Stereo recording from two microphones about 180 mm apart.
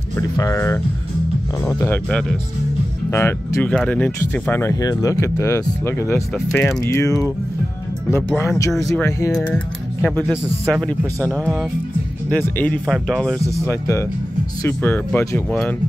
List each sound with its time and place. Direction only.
0.4 s speech: 20° left (ahead or behind)
6.3 s a man's voice: centre (ahead or behind)
6.8 s speech: 15° left (ahead or behind)
10.2 s a man's voice: 5° right (ahead or behind)
13.7 s speech: 15° left (ahead or behind)